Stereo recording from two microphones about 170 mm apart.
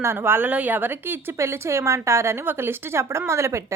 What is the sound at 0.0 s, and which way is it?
A woman's voice, 15° right (ahead or behind).